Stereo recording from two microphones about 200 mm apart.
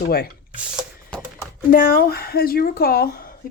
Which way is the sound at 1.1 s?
5° left (ahead or behind).